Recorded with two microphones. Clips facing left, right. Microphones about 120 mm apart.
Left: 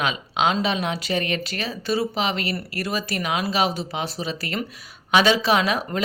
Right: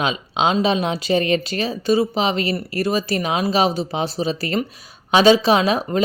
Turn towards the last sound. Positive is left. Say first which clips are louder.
# right 4 dB
turn(degrees=-25)  # may be behind; listen again after turning